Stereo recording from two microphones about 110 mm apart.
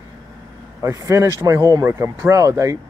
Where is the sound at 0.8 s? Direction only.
25° right (ahead or behind).